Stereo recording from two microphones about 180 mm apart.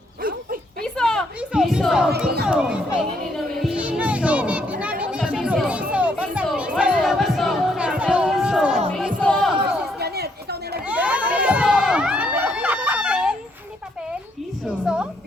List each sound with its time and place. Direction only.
0.8 s a sound: 5° left (ahead or behind)
2.5 s music: 5° right (ahead or behind)
6.7 s crowd: 5° right (ahead or behind)
8.9 s music: 5° left (ahead or behind)
10.0 s chatter: 60° right (ahead or behind)
10.8 s crowd: 5° right (ahead or behind)
14.9 s music: 5° right (ahead or behind)